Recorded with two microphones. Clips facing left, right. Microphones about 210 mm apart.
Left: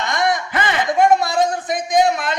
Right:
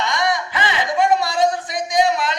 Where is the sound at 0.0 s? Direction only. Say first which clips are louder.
Left 1 dB; 50° left (ahead or behind).